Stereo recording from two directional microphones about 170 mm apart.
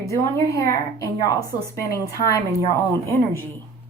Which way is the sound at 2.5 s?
20° right (ahead or behind).